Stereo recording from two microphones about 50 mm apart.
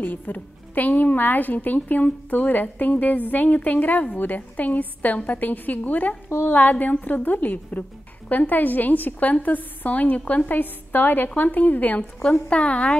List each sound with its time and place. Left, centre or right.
0.0 s a woman's voice: left
12.2 s a woman's voice: left